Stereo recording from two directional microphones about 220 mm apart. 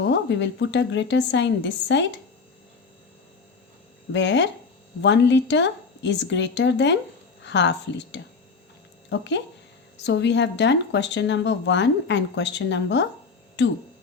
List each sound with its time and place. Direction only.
0.0 s speech: 55° left (ahead or behind)
4.1 s speech: 55° left (ahead or behind)